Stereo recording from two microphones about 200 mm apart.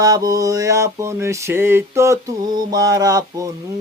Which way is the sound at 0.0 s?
20° right (ahead or behind).